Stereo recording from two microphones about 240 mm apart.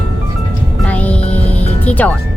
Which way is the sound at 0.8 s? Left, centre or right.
Centre.